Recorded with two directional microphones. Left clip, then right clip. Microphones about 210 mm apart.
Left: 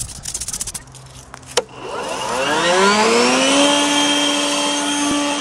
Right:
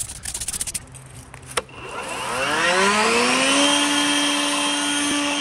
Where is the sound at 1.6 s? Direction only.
45° left (ahead or behind).